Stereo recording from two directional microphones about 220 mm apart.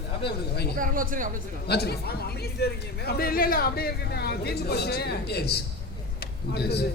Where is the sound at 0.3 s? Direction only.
45° left (ahead or behind).